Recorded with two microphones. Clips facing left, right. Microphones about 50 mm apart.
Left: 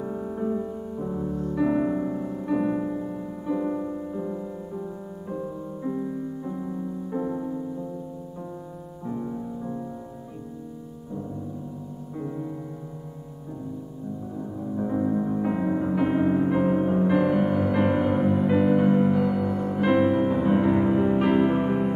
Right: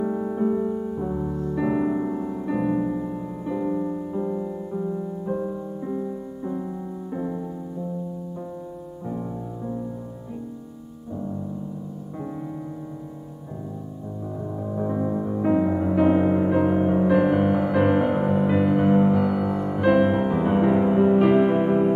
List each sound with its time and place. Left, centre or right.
0.0 s music: centre
6.4 s music: centre
9.0 s music: centre
14.8 s music: centre; by 18.5 s right
18.5 s music: centre
20.0 s music: centre